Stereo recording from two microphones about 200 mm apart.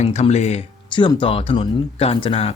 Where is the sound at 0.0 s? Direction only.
35° left (ahead or behind).